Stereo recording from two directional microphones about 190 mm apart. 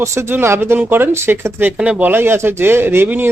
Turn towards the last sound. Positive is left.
turn(degrees=-10)  # may be behind; listen again after turning